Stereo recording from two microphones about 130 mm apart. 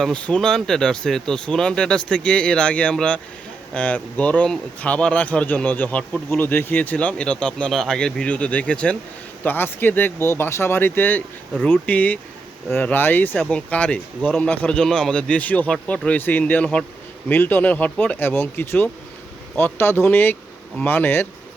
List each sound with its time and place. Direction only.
0.0 s a man's voice: 10° left (ahead or behind)